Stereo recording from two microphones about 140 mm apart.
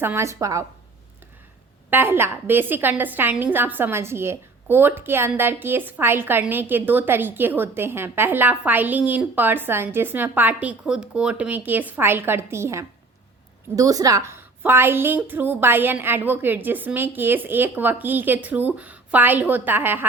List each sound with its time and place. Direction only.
0.0 s a woman's voice: 20° right (ahead or behind)
1.9 s a woman's voice: 15° right (ahead or behind)